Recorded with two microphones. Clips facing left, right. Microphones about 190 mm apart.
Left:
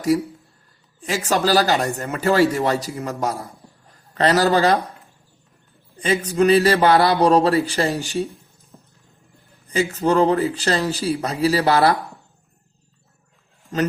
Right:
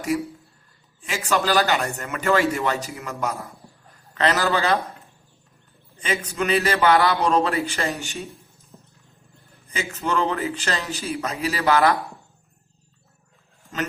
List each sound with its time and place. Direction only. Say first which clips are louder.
1.0 s a man's voice: left 3 dB; 35° left (ahead or behind)
6.0 s a man's voice: left 8 dB; 35° left (ahead or behind)
9.6 s a man's voice: left 8 dB; 35° left (ahead or behind)